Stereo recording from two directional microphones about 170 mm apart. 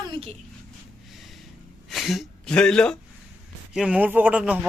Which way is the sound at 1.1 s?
Centre (ahead or behind).